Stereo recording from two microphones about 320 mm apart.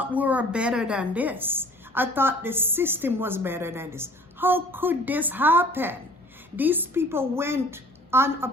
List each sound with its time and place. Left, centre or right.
0.0 s a woman's voice: centre